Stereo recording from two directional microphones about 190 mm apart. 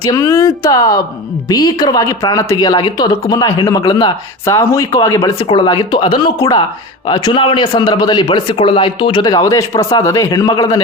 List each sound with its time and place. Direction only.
0.0 s speech: 15° left (ahead or behind)